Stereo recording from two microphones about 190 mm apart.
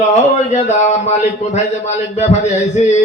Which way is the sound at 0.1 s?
40° left (ahead or behind).